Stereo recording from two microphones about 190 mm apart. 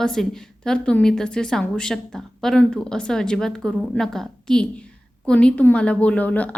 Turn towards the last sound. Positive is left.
turn(degrees=10)  # may be behind; listen again after turning